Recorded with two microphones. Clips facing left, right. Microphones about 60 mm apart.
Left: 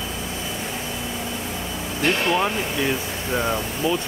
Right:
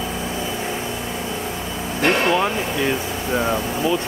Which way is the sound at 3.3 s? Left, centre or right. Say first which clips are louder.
Right 3 dB; centre.